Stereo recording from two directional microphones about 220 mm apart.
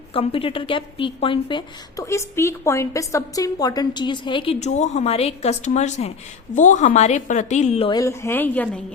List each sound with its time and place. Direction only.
0.1 s a woman's voice: 25° left (ahead or behind); by 8.8 s 10° left (ahead or behind)